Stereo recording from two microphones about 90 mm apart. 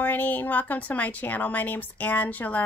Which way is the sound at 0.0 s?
20° left (ahead or behind).